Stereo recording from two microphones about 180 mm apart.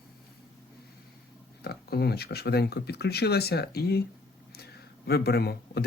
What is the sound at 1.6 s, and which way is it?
Speech, 60° left (ahead or behind).